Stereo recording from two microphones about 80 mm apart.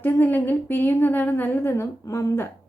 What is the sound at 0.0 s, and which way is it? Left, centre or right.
A woman's voice, left.